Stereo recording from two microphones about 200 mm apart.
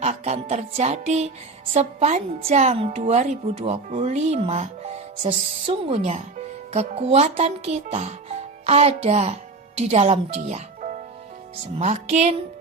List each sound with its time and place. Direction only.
0.0 s speech: 35° right (ahead or behind)